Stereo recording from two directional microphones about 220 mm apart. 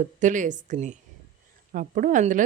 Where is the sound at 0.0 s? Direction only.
35° right (ahead or behind).